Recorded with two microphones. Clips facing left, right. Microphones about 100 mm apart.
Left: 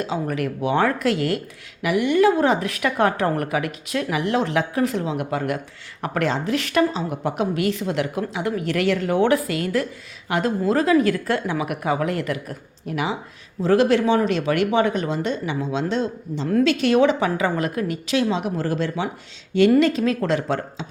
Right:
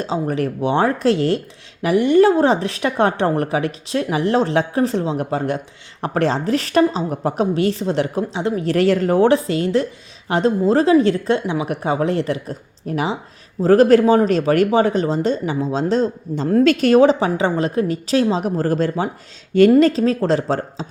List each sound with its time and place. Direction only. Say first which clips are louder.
0.0 s a woman's voice: right 3 dB; 30° right (ahead or behind)